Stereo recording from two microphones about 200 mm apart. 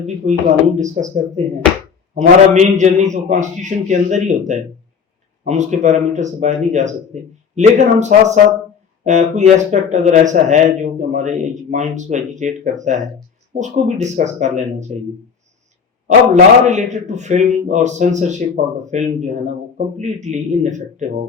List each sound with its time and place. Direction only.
0.3 s a man's voice: 35° right (ahead or behind)
16.0 s a man's voice: 35° right (ahead or behind)